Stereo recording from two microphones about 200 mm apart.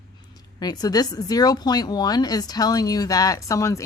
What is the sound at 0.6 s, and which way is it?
Speech, 20° left (ahead or behind).